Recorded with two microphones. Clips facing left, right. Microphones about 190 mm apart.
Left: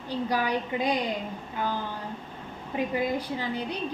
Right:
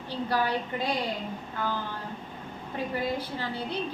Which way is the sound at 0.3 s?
15° left (ahead or behind).